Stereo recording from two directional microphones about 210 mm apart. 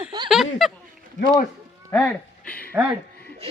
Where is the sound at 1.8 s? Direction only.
10° left (ahead or behind).